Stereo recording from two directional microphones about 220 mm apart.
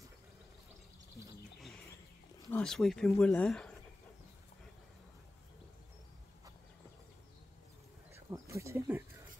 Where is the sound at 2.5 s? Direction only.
5° left (ahead or behind).